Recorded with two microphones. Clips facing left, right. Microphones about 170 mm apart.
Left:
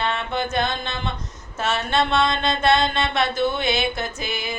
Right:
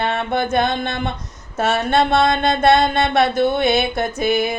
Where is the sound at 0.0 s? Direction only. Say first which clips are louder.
Right 4 dB; 55° right (ahead or behind).